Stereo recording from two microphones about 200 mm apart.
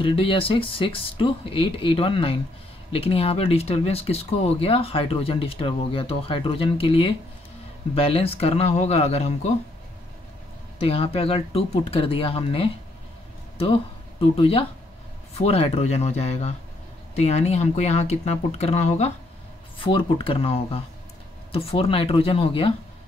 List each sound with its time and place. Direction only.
0.0 s speech: 25° left (ahead or behind)
10.8 s speech: 30° left (ahead or behind)
14.2 s speech: 30° left (ahead or behind)